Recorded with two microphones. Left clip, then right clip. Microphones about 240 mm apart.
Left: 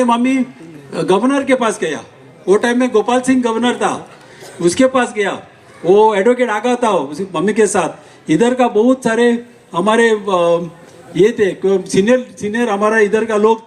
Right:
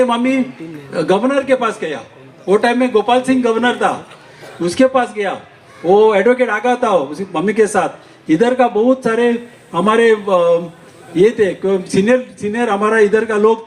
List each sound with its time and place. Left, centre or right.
0.0 s a man's voice: left